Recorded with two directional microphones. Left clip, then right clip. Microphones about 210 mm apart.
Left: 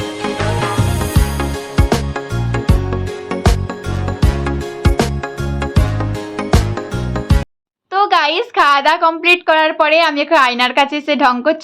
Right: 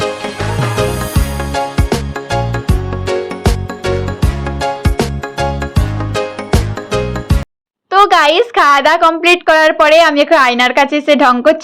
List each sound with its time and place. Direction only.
0.2 s music: centre (ahead or behind)
3.4 s music: centre (ahead or behind)
6.5 s music: centre (ahead or behind)
7.9 s speech: 25° right (ahead or behind)